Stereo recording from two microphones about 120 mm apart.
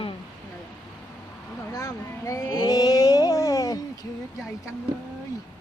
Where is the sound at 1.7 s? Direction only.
25° left (ahead or behind).